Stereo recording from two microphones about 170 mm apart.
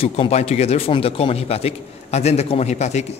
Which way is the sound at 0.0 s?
35° left (ahead or behind).